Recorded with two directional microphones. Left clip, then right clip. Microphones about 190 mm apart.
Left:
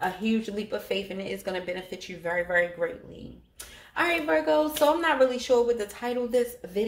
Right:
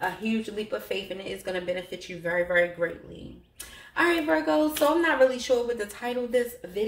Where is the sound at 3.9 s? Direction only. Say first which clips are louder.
Right 1 dB; 40° left (ahead or behind).